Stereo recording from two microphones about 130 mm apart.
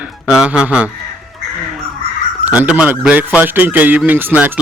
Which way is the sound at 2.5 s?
10° right (ahead or behind).